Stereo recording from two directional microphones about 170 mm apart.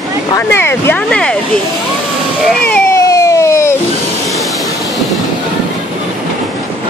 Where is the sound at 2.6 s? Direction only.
10° left (ahead or behind).